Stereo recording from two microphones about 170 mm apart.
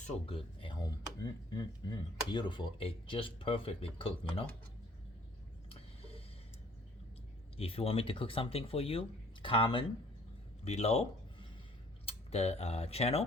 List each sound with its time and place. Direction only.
0.3 s speech: 30° left (ahead or behind)
5.6 s a sound: 35° left (ahead or behind)
7.5 s speech: 35° left (ahead or behind)